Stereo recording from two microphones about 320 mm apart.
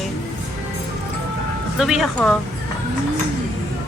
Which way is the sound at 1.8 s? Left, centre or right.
Centre.